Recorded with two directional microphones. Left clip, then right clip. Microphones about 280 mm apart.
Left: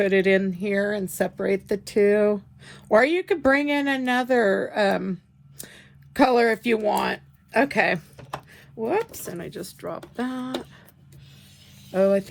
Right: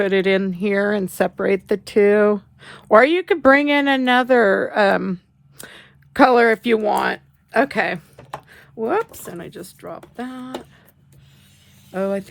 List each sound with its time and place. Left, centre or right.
0.0 s speech: centre
11.9 s speech: centre